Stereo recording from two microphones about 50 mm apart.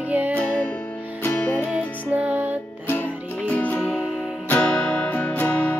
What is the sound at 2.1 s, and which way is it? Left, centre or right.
Music, right.